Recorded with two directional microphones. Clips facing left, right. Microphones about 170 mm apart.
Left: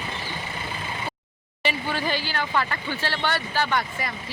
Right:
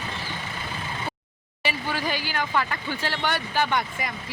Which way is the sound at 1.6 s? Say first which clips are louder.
Left 1 dB; 10° right (ahead or behind).